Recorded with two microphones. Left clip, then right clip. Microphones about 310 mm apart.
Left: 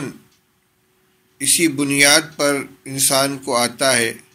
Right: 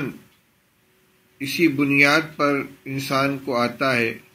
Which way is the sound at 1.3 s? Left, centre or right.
Left.